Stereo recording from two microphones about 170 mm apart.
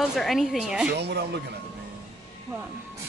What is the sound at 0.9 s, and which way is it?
Speech, 75° right (ahead or behind).